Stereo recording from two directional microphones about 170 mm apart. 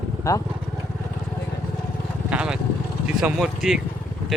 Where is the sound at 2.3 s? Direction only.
5° right (ahead or behind).